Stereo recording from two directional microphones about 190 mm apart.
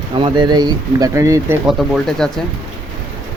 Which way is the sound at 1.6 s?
Centre (ahead or behind).